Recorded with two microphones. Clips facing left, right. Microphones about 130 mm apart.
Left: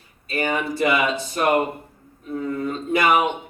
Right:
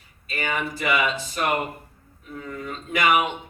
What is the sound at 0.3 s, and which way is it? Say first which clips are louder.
Speech: left 5 dB; 35° left (ahead or behind).